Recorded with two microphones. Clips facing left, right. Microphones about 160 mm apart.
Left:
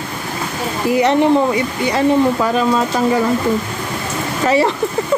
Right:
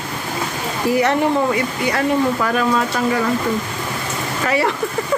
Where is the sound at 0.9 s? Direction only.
20° left (ahead or behind).